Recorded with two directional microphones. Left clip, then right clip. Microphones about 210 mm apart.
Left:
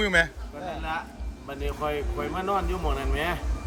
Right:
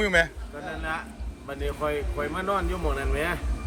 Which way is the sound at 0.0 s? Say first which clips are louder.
Even; 15° left (ahead or behind).